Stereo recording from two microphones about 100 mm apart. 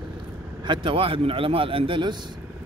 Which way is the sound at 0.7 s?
60° right (ahead or behind).